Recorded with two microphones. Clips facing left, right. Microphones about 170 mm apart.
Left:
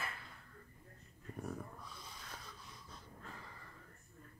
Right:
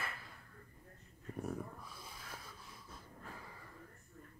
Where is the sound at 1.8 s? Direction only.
5° right (ahead or behind).